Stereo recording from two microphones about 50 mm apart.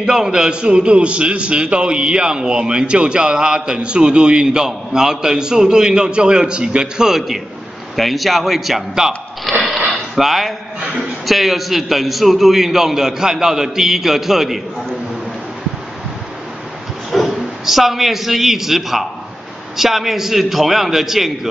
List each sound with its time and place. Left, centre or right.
0.0 s a man's voice: centre
17.3 s a man's voice: centre